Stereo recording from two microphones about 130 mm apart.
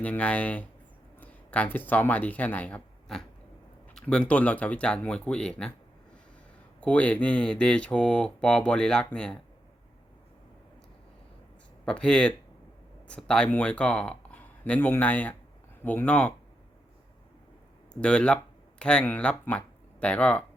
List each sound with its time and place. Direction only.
0.0 s speech: 10° left (ahead or behind)
6.7 s speech: 10° left (ahead or behind)
11.9 s speech: 5° left (ahead or behind)
18.0 s speech: 10° left (ahead or behind)